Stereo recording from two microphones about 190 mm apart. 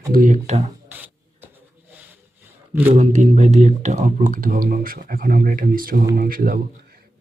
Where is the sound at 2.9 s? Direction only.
35° right (ahead or behind).